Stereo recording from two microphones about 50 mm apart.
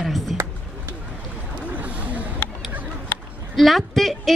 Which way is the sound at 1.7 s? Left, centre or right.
Right.